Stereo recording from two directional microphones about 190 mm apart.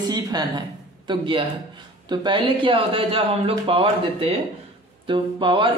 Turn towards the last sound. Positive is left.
turn(degrees=-25)  # may be behind; listen again after turning